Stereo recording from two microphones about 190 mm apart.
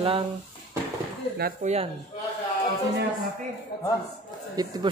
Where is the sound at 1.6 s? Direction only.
35° right (ahead or behind).